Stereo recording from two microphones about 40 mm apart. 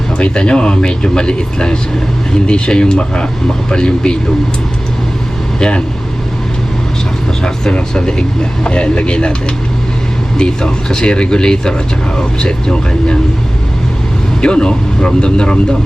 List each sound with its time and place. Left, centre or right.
0.2 s speech: left
5.5 s speech: left
7.4 s speech: left
10.3 s speech: centre
14.4 s speech: left